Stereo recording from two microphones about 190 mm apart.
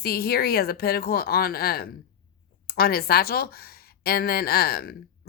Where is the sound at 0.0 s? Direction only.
55° left (ahead or behind).